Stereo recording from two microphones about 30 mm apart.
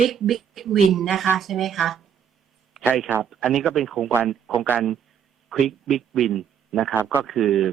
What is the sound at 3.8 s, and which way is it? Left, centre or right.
Speech, centre.